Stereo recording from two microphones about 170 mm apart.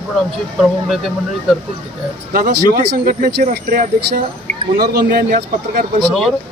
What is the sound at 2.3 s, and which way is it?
Speech, 60° right (ahead or behind).